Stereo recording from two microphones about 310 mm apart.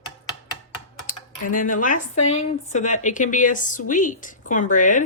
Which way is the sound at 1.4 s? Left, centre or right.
Left.